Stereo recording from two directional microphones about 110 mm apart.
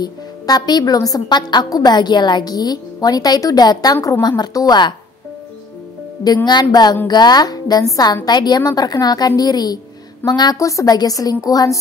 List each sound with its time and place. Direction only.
0.0 s a woman's voice: 40° left (ahead or behind)
6.2 s a woman's voice: 40° left (ahead or behind)